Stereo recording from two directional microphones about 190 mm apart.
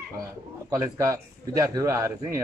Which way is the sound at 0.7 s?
15° right (ahead or behind).